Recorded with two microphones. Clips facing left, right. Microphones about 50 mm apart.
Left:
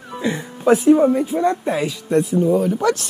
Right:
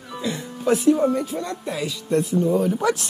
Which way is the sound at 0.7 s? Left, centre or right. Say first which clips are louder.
Left 4 dB; left.